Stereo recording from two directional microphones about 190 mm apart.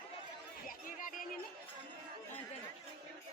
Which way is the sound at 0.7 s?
45° left (ahead or behind).